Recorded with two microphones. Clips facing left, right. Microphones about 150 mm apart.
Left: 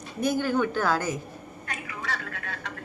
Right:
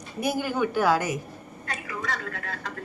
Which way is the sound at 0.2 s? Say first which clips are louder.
Left 1 dB; 10° right (ahead or behind).